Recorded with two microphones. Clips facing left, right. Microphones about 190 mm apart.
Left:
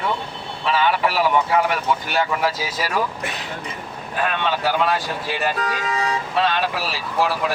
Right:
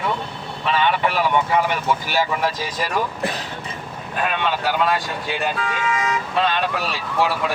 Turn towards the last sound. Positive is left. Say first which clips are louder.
# even
turn(degrees=0)  # may be behind; listen again after turning